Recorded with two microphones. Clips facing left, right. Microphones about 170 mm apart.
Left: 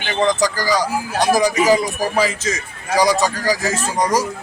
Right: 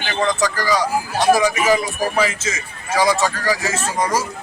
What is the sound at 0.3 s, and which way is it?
A man's voice, 35° left (ahead or behind).